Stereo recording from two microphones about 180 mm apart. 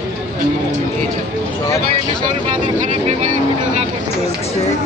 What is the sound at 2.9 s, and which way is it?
Speech, 40° right (ahead or behind).